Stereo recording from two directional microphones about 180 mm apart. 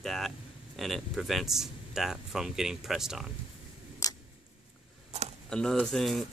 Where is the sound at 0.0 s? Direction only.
Centre (ahead or behind).